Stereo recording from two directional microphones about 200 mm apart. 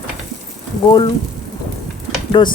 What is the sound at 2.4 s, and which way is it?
Speech, 25° left (ahead or behind).